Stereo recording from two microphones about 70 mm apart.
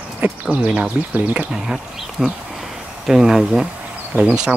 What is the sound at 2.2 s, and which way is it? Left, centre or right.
Speech, centre.